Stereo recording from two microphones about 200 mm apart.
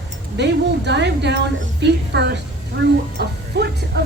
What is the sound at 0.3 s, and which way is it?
A woman's voice, 60° right (ahead or behind).